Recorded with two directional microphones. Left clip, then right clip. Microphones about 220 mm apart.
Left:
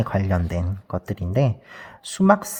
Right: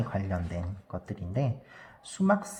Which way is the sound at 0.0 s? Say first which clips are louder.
Left 10 dB; 55° left (ahead or behind).